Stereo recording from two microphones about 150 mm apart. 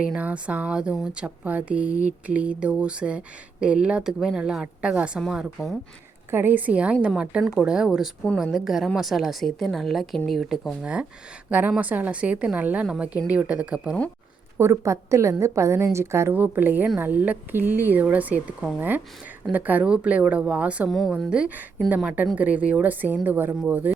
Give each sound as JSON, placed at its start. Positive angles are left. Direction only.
{"t": 0.0, "sound": "a woman's voice", "side_deg": -10}
{"t": 14.6, "sound": "a woman's voice", "side_deg": -20}
{"t": 20.9, "sound": "a woman's voice", "side_deg": 0}